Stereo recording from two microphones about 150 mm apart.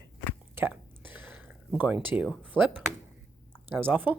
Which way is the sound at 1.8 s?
15° right (ahead or behind).